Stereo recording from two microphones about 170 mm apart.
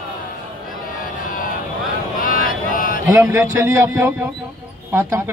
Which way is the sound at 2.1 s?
55° left (ahead or behind).